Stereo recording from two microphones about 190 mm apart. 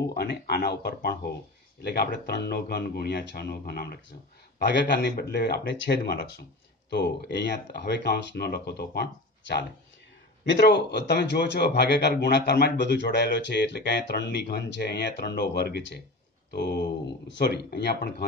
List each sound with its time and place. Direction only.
0.1 s a man's voice: 55° left (ahead or behind)
7.2 s a man's voice: 60° left (ahead or behind)